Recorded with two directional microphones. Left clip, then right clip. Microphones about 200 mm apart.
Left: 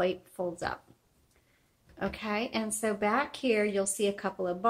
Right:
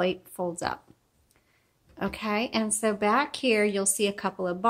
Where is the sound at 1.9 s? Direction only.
50° right (ahead or behind).